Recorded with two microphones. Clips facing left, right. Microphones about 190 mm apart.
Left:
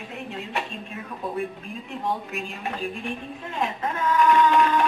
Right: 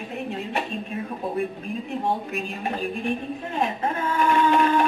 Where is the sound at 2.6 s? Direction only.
45° right (ahead or behind).